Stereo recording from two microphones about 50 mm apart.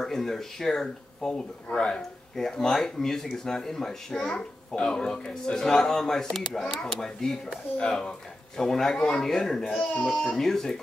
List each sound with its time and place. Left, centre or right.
0.0 s speech: centre